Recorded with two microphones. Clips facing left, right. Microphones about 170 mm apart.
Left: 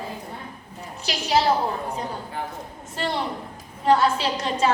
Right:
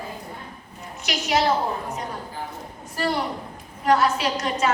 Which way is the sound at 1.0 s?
30° left (ahead or behind).